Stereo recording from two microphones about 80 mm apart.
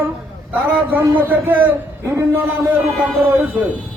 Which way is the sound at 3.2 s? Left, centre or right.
Right.